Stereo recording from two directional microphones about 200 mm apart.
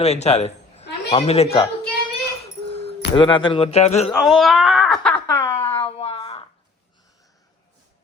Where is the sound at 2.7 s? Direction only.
30° left (ahead or behind).